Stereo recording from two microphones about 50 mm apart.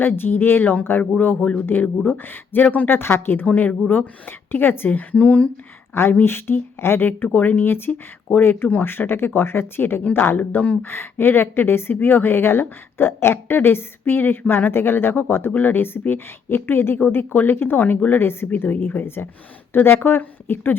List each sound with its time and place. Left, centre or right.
0.0 s speech: left
3.4 s speech: left
4.3 s speech: left
5.9 s speech: left
7.3 s speech: left
18.5 s speech: left